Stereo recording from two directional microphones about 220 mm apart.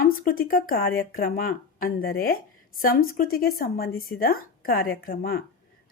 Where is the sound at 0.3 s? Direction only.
40° left (ahead or behind).